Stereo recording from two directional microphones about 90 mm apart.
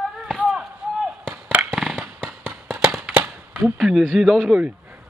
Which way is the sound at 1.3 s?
20° right (ahead or behind).